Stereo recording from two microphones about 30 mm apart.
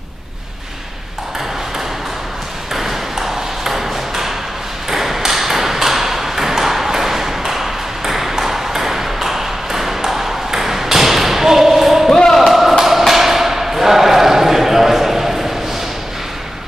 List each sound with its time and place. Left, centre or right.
2.7 s ping: centre
12.4 s thump: centre